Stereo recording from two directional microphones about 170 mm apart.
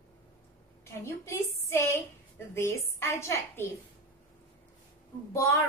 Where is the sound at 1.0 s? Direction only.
15° left (ahead or behind).